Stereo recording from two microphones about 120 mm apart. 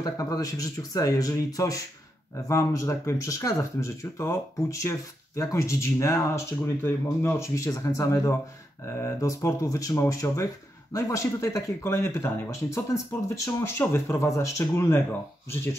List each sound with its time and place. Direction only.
0.0 s speech: 30° left (ahead or behind)